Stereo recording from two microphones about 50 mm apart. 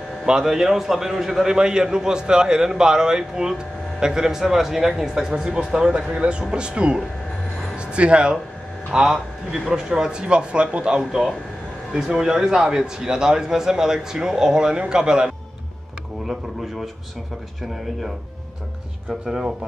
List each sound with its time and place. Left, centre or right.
0.3 s a man's voice: centre
7.7 s music: right
8.9 s a man's voice: centre
10.2 s a man's voice: right
16.3 s a sound: centre
19.2 s a man's voice: centre